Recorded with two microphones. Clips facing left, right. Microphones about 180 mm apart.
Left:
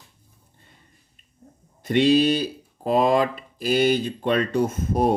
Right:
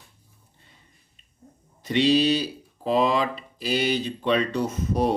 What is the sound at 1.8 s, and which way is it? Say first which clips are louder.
Speech: left 2 dB; 50° left (ahead or behind).